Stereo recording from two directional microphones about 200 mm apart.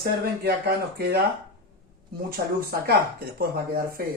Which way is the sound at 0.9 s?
55° right (ahead or behind).